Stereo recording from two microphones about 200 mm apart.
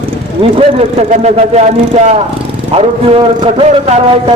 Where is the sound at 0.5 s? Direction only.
30° right (ahead or behind).